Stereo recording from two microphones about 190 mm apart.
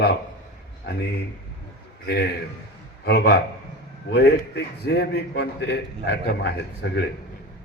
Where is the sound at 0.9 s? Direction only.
55° left (ahead or behind).